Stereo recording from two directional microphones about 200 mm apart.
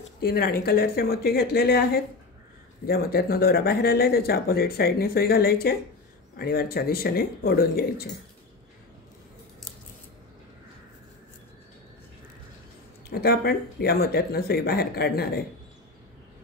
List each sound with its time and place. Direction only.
0.2 s speech: 50° left (ahead or behind)
13.1 s speech: 50° left (ahead or behind)